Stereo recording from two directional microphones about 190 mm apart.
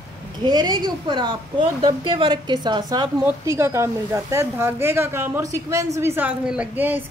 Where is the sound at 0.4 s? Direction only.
20° right (ahead or behind).